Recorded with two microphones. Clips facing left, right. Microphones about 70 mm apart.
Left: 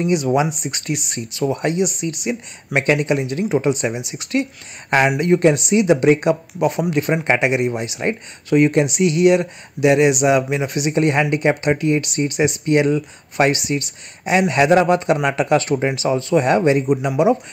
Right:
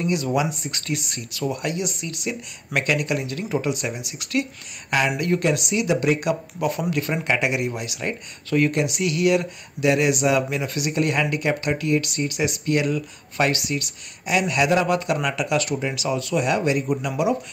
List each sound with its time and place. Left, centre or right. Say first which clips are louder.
0.0 s speech: left 5 dB; left
16.8 s speech: left 6 dB; left